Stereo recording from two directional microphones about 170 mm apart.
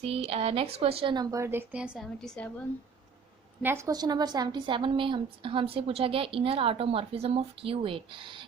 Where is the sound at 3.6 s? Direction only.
10° right (ahead or behind).